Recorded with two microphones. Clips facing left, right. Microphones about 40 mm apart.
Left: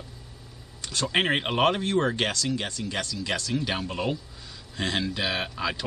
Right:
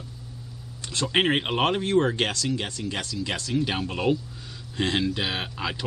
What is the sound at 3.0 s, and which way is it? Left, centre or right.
Speech, right.